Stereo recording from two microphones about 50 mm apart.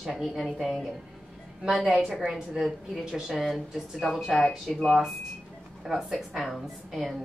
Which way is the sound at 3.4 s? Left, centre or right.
Centre.